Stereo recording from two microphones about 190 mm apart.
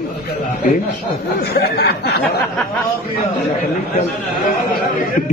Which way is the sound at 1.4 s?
55° left (ahead or behind).